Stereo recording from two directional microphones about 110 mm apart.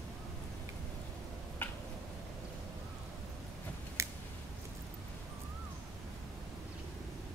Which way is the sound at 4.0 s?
25° right (ahead or behind).